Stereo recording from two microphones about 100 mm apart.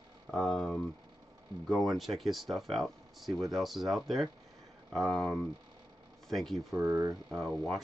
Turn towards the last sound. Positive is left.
turn(degrees=0)  # may be behind; listen again after turning